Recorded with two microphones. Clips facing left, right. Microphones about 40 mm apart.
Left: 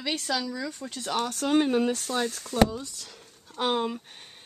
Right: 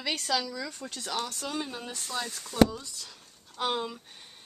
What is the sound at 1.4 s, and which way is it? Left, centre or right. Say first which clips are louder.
Speech: left 12 dB; left.